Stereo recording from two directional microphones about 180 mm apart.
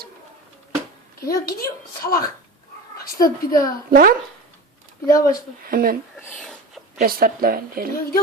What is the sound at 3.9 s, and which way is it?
Speech, 55° right (ahead or behind).